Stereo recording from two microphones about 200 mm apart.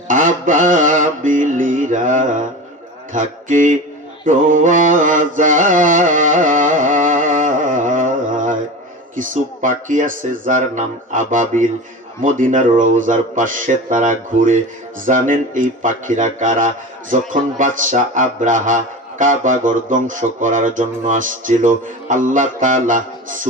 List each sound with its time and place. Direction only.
0.1 s speech: 40° right (ahead or behind)
4.3 s mantra: 40° right (ahead or behind)
9.1 s speech: 40° right (ahead or behind)